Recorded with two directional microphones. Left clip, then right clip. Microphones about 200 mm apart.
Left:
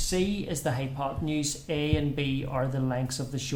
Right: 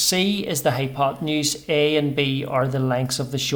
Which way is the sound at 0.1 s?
35° right (ahead or behind).